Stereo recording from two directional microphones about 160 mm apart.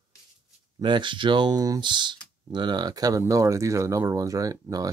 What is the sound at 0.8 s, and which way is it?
Speech, 30° right (ahead or behind).